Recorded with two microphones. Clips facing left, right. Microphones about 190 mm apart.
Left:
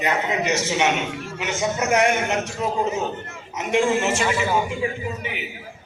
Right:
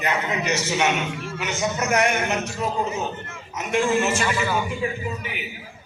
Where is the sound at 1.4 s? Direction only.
25° left (ahead or behind).